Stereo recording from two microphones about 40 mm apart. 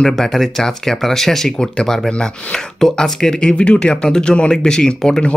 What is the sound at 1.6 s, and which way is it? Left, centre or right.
Speech, centre.